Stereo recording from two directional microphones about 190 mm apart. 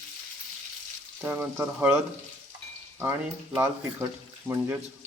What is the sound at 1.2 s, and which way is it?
Speech, 10° right (ahead or behind).